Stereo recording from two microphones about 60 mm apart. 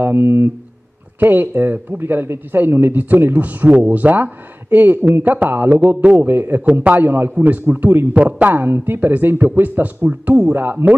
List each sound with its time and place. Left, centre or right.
0.0 s a man's voice: right
6.6 s a man's voice: right
8.1 s a man's voice: right